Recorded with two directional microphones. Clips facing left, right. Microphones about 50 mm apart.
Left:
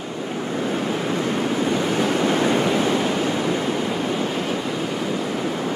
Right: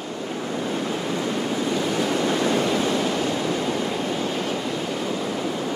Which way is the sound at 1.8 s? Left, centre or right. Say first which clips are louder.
Left 2 dB; left.